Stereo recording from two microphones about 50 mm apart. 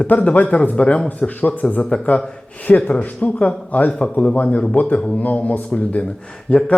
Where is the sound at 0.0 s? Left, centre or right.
Left.